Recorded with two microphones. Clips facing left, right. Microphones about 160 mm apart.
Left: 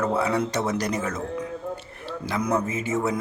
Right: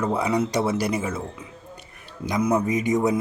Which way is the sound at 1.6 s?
75° left (ahead or behind).